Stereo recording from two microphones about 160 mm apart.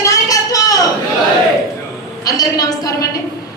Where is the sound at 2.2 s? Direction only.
20° left (ahead or behind).